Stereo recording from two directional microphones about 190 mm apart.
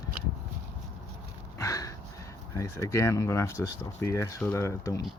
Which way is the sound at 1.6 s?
15° left (ahead or behind).